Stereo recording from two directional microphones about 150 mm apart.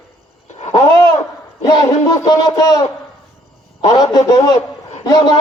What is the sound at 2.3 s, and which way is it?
Speech, 25° left (ahead or behind).